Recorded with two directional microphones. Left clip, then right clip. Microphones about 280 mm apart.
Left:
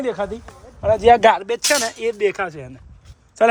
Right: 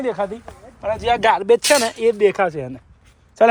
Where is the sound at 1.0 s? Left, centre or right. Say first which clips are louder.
Left 7 dB; left.